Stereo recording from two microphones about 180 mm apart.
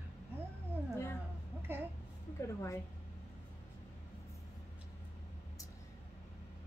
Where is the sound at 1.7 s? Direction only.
10° right (ahead or behind).